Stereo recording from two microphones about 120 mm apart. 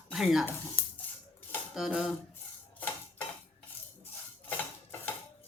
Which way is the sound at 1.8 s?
Centre (ahead or behind).